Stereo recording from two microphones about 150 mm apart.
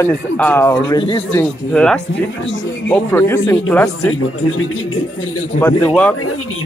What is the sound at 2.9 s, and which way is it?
Speech, 15° left (ahead or behind).